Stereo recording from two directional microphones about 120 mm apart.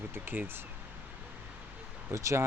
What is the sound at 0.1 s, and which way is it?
Speech, 20° right (ahead or behind).